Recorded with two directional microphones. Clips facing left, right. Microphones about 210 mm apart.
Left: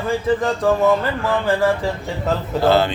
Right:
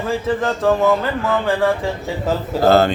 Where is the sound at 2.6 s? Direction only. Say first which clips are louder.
Right 3 dB; 45° right (ahead or behind).